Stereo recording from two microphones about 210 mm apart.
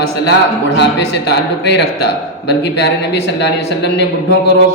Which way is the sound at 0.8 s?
55° left (ahead or behind).